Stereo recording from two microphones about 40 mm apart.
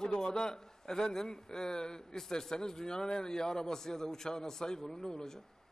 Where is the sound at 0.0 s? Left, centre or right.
Centre.